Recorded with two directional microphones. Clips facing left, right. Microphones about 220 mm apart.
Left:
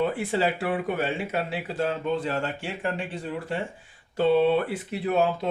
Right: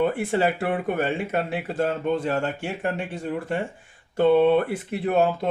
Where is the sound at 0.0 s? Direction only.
50° right (ahead or behind).